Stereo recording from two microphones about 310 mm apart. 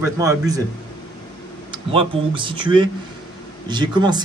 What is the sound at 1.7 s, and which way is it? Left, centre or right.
A man's voice, centre.